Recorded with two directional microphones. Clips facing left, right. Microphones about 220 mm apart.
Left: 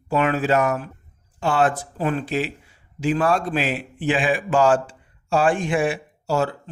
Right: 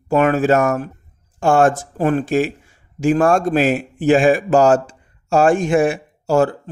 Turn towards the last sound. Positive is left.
turn(degrees=-50)  # may be behind; listen again after turning